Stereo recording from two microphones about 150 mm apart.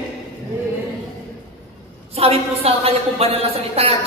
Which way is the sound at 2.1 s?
40° right (ahead or behind).